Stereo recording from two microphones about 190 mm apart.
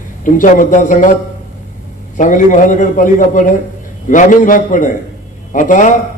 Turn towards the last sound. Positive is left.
turn(degrees=40)  # may be behind; listen again after turning